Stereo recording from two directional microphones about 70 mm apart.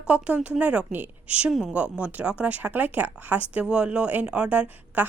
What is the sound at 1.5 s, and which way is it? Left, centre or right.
Speech, centre.